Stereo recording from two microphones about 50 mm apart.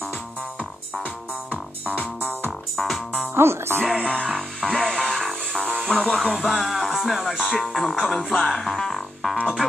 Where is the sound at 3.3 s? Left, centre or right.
Right.